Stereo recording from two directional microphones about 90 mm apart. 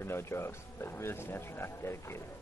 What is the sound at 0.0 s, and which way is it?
A man's voice, 30° left (ahead or behind).